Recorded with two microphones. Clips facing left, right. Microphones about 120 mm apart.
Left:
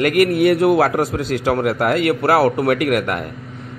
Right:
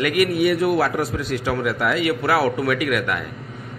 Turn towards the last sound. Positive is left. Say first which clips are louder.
# left 4 dB
turn(degrees=60)  # may be behind; listen again after turning